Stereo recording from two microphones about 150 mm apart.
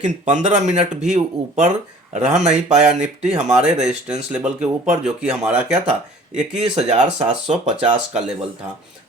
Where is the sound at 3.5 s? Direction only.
5° right (ahead or behind).